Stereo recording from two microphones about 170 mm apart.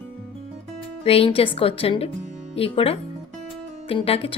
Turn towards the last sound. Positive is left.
turn(degrees=35)  # may be behind; listen again after turning